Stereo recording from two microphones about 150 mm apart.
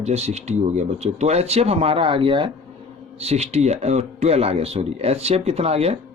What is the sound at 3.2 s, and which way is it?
Speech, 45° right (ahead or behind).